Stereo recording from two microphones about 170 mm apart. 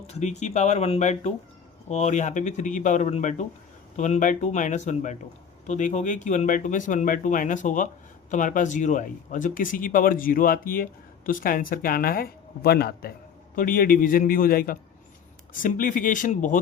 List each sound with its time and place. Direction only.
0.1 s speech: 40° left (ahead or behind); by 13.1 s 65° left (ahead or behind)
13.6 s speech: 55° left (ahead or behind)